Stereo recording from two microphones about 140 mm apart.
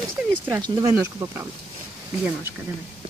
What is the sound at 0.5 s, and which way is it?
Speech, 20° right (ahead or behind).